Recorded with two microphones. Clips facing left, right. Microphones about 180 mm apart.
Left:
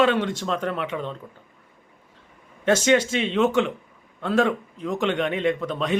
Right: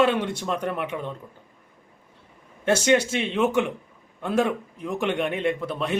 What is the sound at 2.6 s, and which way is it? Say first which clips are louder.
Speech: left 1 dB; 10° right (ahead or behind).